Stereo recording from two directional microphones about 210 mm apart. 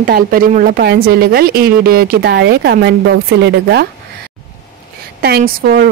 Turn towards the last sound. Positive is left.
turn(degrees=-45)  # may be behind; listen again after turning